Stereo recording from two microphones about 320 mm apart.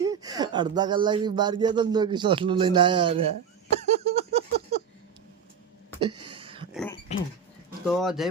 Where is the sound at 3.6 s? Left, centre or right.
Right.